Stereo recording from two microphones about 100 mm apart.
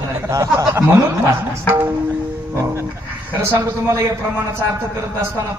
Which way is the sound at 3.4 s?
25° right (ahead or behind).